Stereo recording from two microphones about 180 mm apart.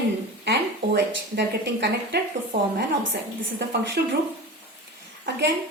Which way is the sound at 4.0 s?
65° right (ahead or behind).